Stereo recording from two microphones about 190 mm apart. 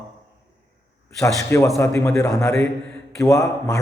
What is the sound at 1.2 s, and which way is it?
A man's voice, 15° left (ahead or behind).